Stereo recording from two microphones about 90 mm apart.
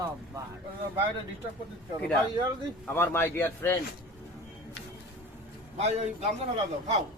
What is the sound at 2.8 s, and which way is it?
Speech, 25° left (ahead or behind).